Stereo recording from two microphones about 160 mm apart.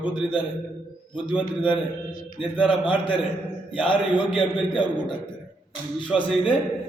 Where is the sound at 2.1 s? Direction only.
65° left (ahead or behind).